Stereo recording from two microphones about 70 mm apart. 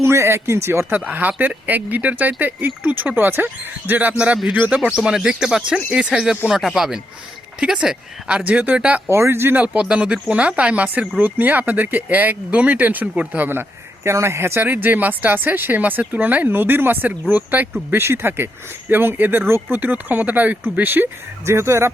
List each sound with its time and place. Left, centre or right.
0.0 s speech: right
4.8 s speech: centre
9.0 s speech: right
9.6 s speech: centre; by 14.6 s right
14.6 s speech: right
21.4 s speech: right